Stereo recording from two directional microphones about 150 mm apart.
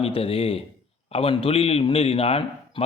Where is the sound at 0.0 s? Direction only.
40° left (ahead or behind).